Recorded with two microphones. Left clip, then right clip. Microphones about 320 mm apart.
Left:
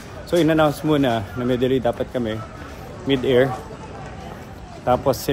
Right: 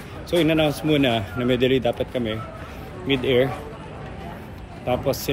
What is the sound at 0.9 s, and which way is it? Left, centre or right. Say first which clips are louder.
Speech: left 1 dB; left.